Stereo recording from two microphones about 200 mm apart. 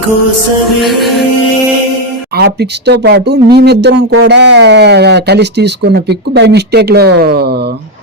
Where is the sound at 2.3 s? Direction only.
55° right (ahead or behind).